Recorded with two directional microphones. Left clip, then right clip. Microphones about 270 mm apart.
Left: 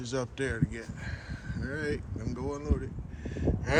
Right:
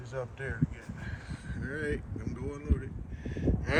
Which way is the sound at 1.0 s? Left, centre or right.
Left.